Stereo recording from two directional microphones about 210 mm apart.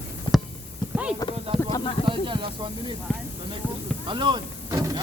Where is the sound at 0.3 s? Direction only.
20° left (ahead or behind).